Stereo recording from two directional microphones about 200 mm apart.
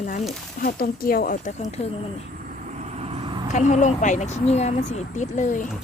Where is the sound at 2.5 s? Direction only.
35° right (ahead or behind).